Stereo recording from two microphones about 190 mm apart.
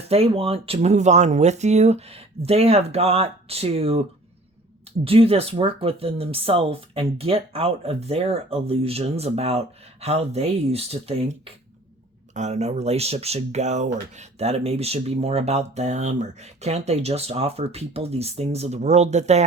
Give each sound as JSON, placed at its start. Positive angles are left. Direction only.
{"t": 0.1, "sound": "speech", "side_deg": -30}
{"t": 5.0, "sound": "speech", "side_deg": -30}